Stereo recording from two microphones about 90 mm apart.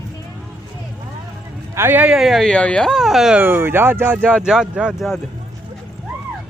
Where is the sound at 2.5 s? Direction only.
10° left (ahead or behind).